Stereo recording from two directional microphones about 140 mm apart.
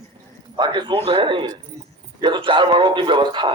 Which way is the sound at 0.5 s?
35° right (ahead or behind).